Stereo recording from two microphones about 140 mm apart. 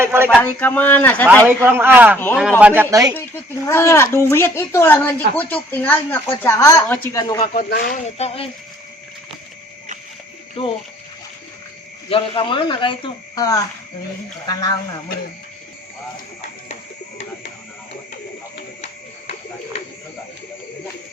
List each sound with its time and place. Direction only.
0.0 s a sound: 15° right (ahead or behind)
0.4 s a child's voice: 10° left (ahead or behind)
1.6 s a man's voice: 15° right (ahead or behind)
2.1 s a child's voice: 15° left (ahead or behind)
2.6 s a man's voice: 10° right (ahead or behind)
2.9 s speech: 25° right (ahead or behind)
3.2 s a child's voice: 15° left (ahead or behind)
6.8 s a child's voice: 10° left (ahead or behind)
7.1 s speech: 25° left (ahead or behind)
7.4 s speech: 65° left (ahead or behind); by 8.4 s 45° left (ahead or behind)
10.6 s speech: 40° left (ahead or behind)
12.0 s speech: 40° left (ahead or behind)